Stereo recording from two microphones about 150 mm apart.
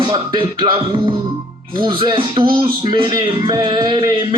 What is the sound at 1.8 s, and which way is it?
Speech, 35° right (ahead or behind).